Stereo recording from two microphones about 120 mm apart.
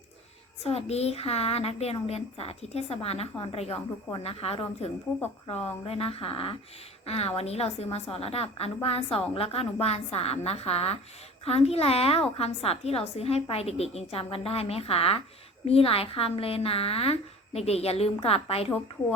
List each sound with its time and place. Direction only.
0.6 s a woman's voice: 60° left (ahead or behind)